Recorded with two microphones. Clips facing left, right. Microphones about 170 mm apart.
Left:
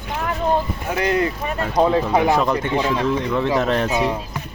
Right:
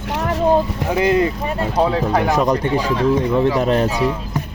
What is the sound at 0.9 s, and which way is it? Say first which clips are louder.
Speech: right 4 dB; 25° right (ahead or behind).